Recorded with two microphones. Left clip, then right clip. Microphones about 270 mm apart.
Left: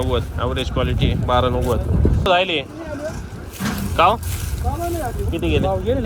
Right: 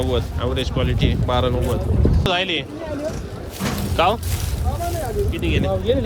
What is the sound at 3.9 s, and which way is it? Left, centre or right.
Speech, centre.